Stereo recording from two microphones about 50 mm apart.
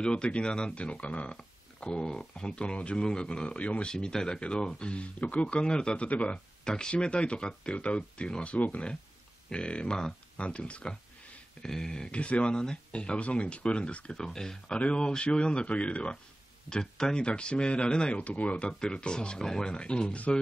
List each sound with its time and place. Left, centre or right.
0.0 s speech: centre
3.9 s speech: centre
8.5 s speech: left
16.6 s speech: centre; by 18.7 s left
18.7 s speech: centre